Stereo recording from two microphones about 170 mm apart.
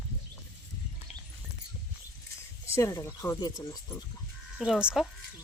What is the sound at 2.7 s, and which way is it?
Speech, 15° left (ahead or behind).